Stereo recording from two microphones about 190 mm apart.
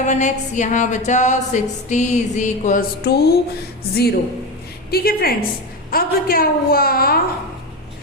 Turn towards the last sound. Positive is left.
turn(degrees=50)  # may be behind; listen again after turning